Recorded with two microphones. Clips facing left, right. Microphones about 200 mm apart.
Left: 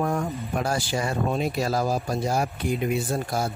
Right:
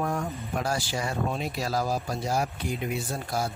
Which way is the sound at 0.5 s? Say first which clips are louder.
Left 3 dB; 55° left (ahead or behind).